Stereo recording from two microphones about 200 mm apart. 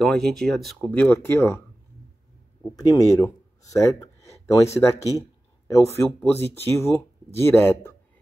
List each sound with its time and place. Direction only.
0.0 s speech: centre (ahead or behind)
2.7 s speech: 15° left (ahead or behind)